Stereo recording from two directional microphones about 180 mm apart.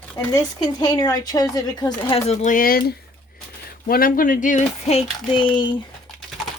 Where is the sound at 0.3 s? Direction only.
20° left (ahead or behind).